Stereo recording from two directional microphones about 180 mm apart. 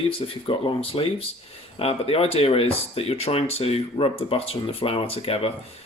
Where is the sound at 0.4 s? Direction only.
30° left (ahead or behind).